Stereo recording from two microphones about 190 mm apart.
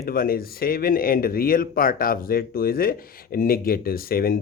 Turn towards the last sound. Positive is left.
turn(degrees=50)  # may be behind; listen again after turning